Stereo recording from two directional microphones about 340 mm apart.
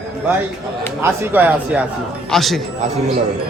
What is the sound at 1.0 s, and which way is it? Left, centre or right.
Speech, centre.